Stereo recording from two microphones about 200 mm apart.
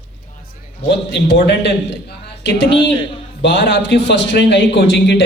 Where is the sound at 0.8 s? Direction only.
60° left (ahead or behind).